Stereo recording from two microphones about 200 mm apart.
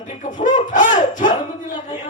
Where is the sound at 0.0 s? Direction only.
40° left (ahead or behind).